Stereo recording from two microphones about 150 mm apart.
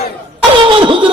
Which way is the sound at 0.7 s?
35° right (ahead or behind).